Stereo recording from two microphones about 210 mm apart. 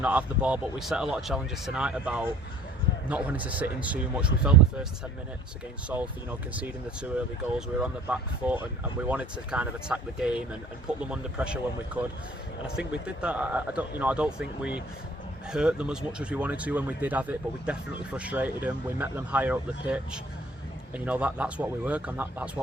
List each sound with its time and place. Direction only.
0.0 s speech: 5° right (ahead or behind)
6.5 s speech: 5° right (ahead or behind)